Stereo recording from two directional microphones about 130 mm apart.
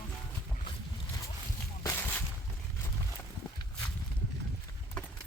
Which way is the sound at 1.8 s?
15° left (ahead or behind).